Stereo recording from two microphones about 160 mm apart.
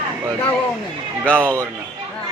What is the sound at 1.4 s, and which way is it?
Speech, 15° right (ahead or behind).